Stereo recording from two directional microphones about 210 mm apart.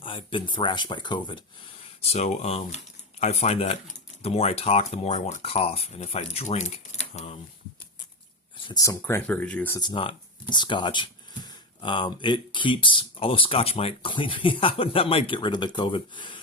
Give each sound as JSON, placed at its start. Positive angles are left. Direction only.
{"t": 0.0, "sound": "speech", "side_deg": 25}
{"t": 8.6, "sound": "speech", "side_deg": 15}
{"t": 9.8, "sound": "speech", "side_deg": 25}